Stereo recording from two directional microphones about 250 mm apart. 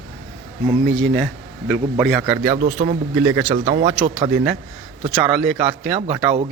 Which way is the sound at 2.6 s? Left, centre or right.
Right.